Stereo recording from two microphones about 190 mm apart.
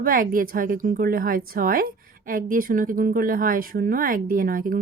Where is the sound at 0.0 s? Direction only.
50° right (ahead or behind).